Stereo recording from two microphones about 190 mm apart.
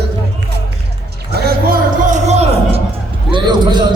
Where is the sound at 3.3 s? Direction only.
25° right (ahead or behind).